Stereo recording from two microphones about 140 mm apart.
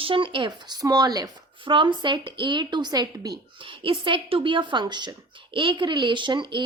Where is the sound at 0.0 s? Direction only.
35° right (ahead or behind).